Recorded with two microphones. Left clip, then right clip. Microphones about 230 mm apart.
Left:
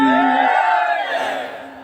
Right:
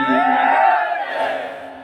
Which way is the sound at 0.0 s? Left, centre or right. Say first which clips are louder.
Left 1 dB; left.